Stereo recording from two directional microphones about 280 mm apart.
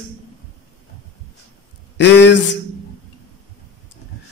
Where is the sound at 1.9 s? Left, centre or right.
Left.